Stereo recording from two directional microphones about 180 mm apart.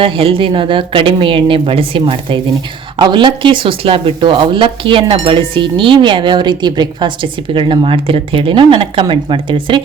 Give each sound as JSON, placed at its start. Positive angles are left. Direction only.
{"t": 0.0, "sound": "speech", "side_deg": -30}